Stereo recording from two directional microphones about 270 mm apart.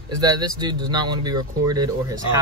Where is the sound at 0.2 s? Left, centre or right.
Centre.